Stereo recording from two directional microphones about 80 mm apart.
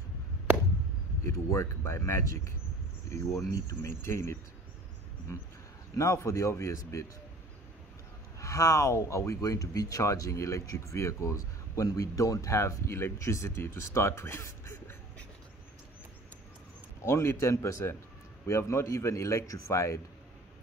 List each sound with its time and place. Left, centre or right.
1.2 s speech: left
5.9 s speech: left
8.4 s speech: left
17.0 s speech: left